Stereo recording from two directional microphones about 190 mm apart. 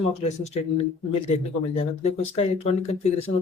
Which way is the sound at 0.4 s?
35° left (ahead or behind).